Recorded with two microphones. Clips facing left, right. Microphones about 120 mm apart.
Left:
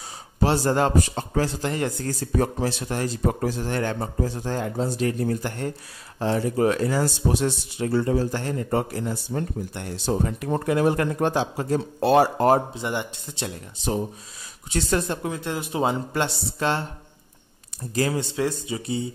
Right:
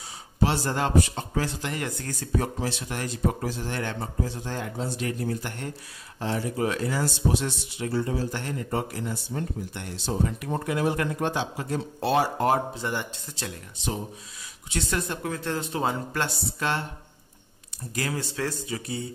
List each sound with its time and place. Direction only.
0.4 s a man's voice: 40° left (ahead or behind)
8.4 s speech: 40° left (ahead or behind)
12.7 s speech: 20° left (ahead or behind)
14.7 s a man's voice: 35° left (ahead or behind)
15.2 s speech: 15° left (ahead or behind)
17.9 s speech: 25° left (ahead or behind)